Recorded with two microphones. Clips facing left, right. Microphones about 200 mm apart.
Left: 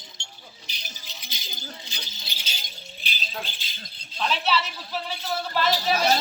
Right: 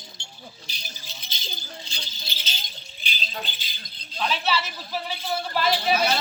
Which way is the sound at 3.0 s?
Centre (ahead or behind).